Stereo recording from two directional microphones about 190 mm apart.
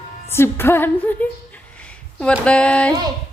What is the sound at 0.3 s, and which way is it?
Speech, 10° left (ahead or behind).